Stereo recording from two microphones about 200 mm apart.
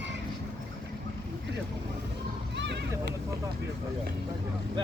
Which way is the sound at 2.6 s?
60° right (ahead or behind).